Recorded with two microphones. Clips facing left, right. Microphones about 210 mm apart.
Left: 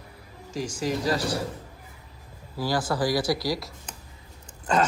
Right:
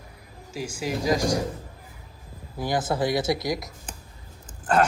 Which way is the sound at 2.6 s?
20° right (ahead or behind).